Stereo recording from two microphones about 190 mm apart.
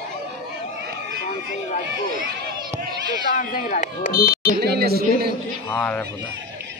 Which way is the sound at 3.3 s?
45° left (ahead or behind).